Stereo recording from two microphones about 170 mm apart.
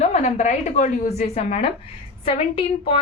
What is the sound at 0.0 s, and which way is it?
A woman's voice, 40° left (ahead or behind).